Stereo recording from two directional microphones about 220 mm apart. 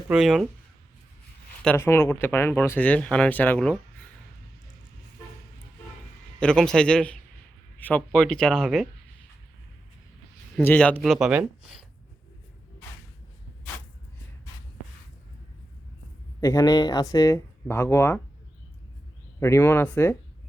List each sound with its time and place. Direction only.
0.1 s speech: centre (ahead or behind)
1.6 s speech: 10° left (ahead or behind)
6.4 s speech: 5° left (ahead or behind)
10.6 s speech: 5° left (ahead or behind)
16.4 s speech: 15° left (ahead or behind)
19.4 s speech: 10° left (ahead or behind)